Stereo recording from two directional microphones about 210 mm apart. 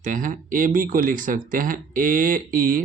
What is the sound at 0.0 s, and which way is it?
Speech, 40° right (ahead or behind).